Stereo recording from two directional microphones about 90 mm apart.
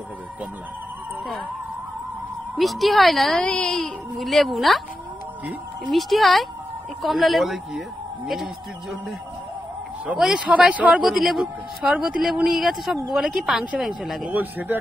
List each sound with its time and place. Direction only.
2.5 s a woman's voice: centre (ahead or behind)
5.9 s a woman's voice: centre (ahead or behind)
10.0 s a man's voice: 5° right (ahead or behind)
14.3 s speech: 20° right (ahead or behind)